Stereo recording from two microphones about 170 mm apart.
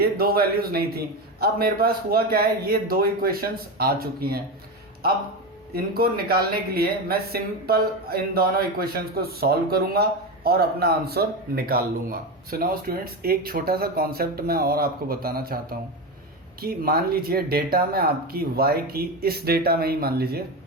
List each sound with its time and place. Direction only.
0.0 s speech: 65° right (ahead or behind)
5.7 s speech: 60° right (ahead or behind)
16.6 s speech: 60° right (ahead or behind)